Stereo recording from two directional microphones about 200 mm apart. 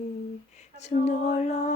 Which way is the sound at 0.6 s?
35° left (ahead or behind).